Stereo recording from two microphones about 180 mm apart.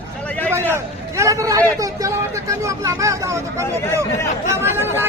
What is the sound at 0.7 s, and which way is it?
Speech, 15° right (ahead or behind).